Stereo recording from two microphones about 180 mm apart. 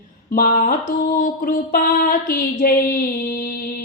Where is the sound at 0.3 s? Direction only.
50° left (ahead or behind).